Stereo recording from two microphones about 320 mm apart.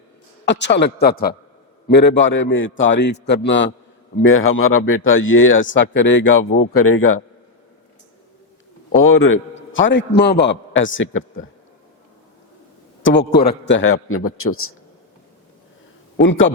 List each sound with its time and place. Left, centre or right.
0.4 s a man's voice: left
9.0 s a man's voice: left
13.4 s a man's voice: left
16.2 s a man's voice: left